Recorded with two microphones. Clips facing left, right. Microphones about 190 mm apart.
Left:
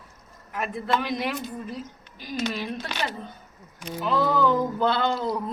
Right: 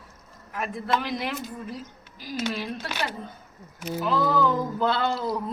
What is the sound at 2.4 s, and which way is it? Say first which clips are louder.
A woman's voice: left 1 dB; 5° right (ahead or behind).